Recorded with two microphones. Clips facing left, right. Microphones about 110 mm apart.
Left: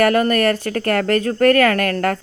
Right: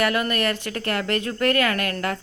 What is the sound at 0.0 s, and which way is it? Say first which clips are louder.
Speech: left 7 dB; 40° left (ahead or behind).